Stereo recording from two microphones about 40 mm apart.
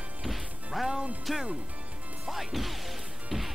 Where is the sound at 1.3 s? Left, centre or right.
Centre.